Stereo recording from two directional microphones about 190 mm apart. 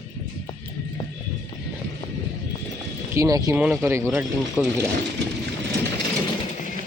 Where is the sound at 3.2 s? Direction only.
20° right (ahead or behind).